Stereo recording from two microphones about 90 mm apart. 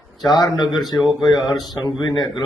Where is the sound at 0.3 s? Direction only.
50° left (ahead or behind).